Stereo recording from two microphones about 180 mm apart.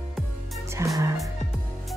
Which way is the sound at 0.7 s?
15° right (ahead or behind).